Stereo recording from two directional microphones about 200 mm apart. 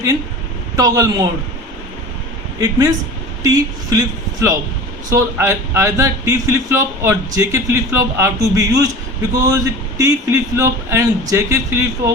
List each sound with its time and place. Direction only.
0.8 s a man's voice: 15° right (ahead or behind)
2.6 s a man's voice: 15° right (ahead or behind)